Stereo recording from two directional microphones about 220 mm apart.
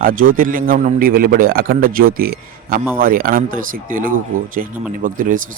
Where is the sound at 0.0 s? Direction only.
40° right (ahead or behind).